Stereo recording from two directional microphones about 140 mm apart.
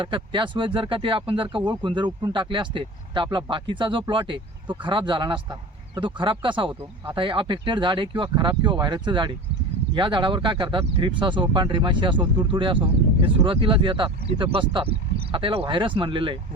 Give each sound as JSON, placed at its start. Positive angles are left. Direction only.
{"t": 0.0, "sound": "speech", "side_deg": -35}